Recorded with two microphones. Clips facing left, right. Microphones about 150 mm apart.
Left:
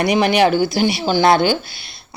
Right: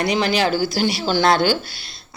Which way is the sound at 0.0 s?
20° left (ahead or behind).